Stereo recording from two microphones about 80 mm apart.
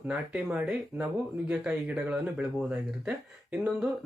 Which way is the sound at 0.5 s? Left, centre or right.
Centre.